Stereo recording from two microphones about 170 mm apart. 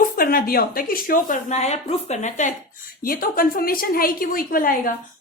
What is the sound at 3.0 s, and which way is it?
A woman's voice, 55° left (ahead or behind).